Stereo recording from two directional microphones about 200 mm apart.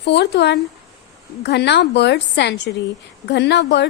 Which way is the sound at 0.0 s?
55° left (ahead or behind).